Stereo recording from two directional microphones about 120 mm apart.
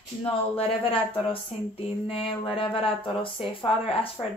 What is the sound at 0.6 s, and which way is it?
Speech, 50° left (ahead or behind).